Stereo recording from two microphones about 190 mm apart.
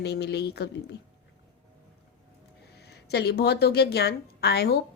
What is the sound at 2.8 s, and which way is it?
A woman's voice, 60° left (ahead or behind).